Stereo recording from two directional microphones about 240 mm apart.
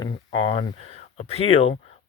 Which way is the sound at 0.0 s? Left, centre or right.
Centre.